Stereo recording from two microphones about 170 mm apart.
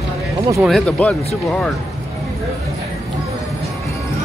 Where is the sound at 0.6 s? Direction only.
5° left (ahead or behind).